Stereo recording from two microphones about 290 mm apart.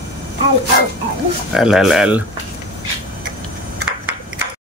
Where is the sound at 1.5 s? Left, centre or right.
Centre.